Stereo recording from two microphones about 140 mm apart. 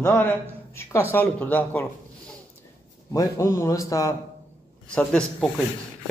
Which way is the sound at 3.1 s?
25° left (ahead or behind).